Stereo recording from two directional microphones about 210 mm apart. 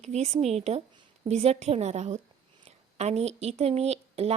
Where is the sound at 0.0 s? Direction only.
30° right (ahead or behind).